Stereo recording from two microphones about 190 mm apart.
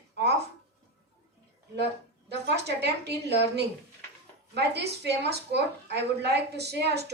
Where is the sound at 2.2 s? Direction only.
60° right (ahead or behind).